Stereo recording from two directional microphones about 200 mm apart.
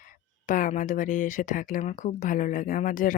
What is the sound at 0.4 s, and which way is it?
Speech, 40° left (ahead or behind).